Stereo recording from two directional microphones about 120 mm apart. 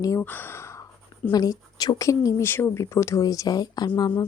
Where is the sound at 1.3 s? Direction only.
35° left (ahead or behind).